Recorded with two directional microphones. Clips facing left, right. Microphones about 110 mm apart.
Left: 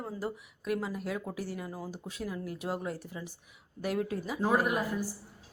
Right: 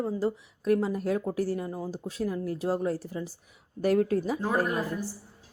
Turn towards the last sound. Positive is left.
turn(degrees=15)  # may be behind; listen again after turning